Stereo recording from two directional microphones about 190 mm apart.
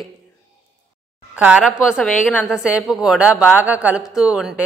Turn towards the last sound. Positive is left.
turn(degrees=-5)  # may be behind; listen again after turning